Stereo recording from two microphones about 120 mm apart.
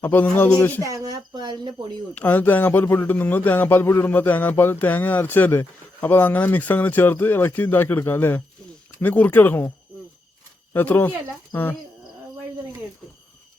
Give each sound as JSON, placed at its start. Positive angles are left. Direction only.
{"t": 0.0, "sound": "speech", "side_deg": 15}
{"t": 0.8, "sound": "speech", "side_deg": -30}
{"t": 2.1, "sound": "speech", "side_deg": 15}
{"t": 10.8, "sound": "speech", "side_deg": 15}